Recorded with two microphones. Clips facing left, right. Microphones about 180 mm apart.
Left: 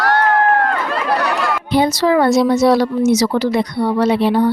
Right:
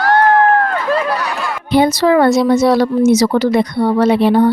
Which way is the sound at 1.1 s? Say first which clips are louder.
Left 3 dB; 60° left (ahead or behind).